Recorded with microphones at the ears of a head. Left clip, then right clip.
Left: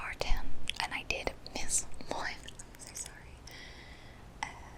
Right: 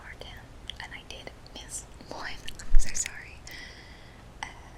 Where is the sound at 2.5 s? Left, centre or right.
Right.